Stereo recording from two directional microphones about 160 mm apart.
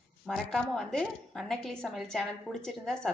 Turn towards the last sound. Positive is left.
turn(degrees=5)  # may be behind; listen again after turning